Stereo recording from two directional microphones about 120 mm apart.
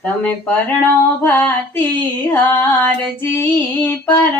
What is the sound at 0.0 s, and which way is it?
Female singing, 10° left (ahead or behind).